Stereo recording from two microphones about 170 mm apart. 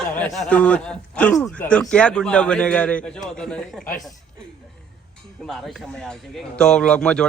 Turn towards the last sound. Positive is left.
turn(degrees=5)  # may be behind; listen again after turning